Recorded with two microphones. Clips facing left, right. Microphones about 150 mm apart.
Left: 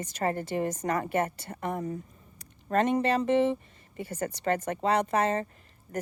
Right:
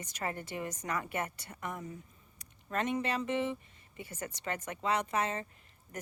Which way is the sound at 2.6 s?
40° left (ahead or behind).